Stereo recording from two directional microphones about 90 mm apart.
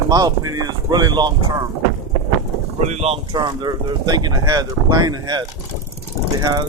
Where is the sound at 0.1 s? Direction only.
50° right (ahead or behind).